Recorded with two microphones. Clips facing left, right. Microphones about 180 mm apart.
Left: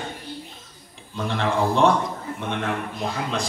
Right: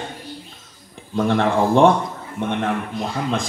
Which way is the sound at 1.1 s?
55° right (ahead or behind).